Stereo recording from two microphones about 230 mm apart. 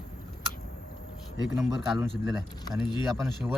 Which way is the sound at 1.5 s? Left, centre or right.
Centre.